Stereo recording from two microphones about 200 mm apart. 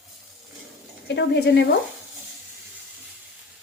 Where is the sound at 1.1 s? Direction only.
55° left (ahead or behind).